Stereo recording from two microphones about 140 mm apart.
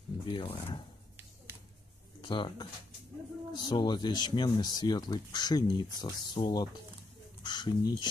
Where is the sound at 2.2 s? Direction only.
35° left (ahead or behind).